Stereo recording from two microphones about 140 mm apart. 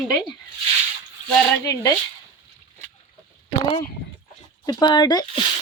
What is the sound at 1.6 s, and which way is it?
Speech, 25° left (ahead or behind).